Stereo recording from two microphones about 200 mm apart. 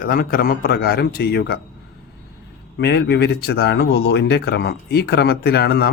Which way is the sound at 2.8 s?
55° left (ahead or behind).